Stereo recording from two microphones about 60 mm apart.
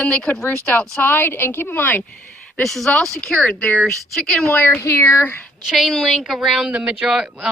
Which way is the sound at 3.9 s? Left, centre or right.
Centre.